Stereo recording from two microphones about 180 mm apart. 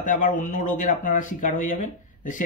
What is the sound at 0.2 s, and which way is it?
Speech, 45° left (ahead or behind).